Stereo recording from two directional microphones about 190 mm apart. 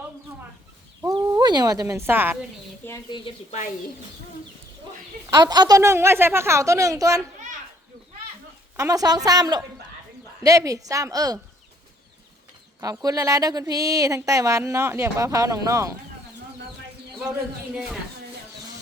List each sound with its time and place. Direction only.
1.0 s speech: 20° right (ahead or behind)
2.8 s speech: 15° left (ahead or behind)
3.2 s speech: 40° left (ahead or behind)
5.2 s speech: 20° right (ahead or behind)
8.7 s a woman's voice: 15° right (ahead or behind)
12.8 s speech: 20° right (ahead or behind)